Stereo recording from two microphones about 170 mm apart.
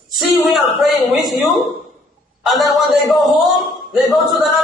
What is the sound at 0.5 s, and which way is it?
Speech, centre (ahead or behind).